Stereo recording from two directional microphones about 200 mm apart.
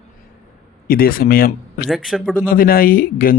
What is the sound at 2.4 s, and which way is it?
Speech, 45° left (ahead or behind).